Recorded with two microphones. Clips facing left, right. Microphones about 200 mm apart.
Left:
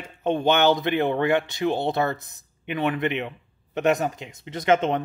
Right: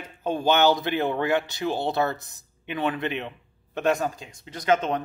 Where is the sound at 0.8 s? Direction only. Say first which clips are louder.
Left 3 dB; 55° left (ahead or behind).